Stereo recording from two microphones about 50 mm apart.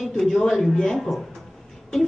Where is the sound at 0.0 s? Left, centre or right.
Centre.